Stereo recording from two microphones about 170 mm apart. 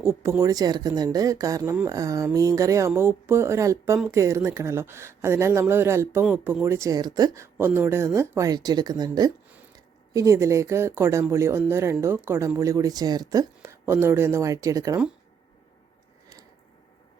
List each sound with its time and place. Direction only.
0.0 s speech: 15° right (ahead or behind)